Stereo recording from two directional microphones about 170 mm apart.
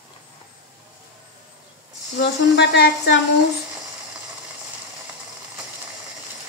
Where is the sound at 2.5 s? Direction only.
75° left (ahead or behind).